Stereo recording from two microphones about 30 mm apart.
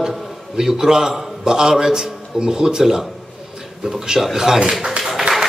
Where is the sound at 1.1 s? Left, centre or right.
Centre.